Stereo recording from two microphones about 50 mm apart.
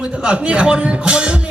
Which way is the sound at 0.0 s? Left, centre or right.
Centre.